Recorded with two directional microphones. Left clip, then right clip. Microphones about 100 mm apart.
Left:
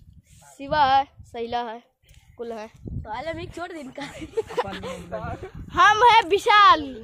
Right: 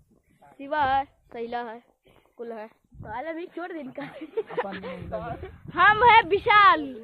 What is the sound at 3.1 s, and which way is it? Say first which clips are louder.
A woman's voice: left 2 dB; 25° right (ahead or behind).